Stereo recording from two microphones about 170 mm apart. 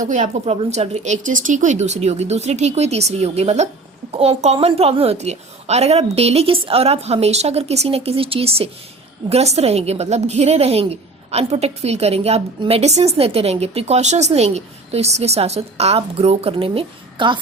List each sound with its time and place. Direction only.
0.0 s a woman's voice: 45° right (ahead or behind); by 17.4 s 30° right (ahead or behind)